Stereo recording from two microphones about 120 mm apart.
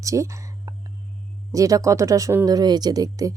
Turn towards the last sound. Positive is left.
turn(degrees=-30)  # may be behind; listen again after turning